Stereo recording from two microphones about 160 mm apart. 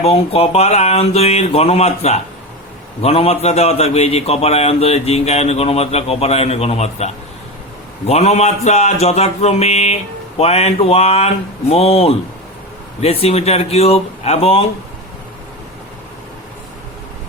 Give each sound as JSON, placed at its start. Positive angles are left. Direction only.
{"t": 0.0, "sound": "a man's voice", "side_deg": 40}